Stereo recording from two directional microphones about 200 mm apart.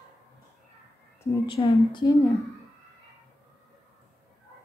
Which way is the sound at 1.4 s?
25° left (ahead or behind).